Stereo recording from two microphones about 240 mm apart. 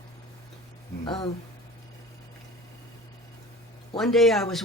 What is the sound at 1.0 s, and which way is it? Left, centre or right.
Speech, centre.